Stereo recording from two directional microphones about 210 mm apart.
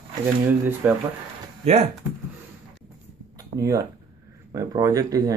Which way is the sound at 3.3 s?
15° right (ahead or behind).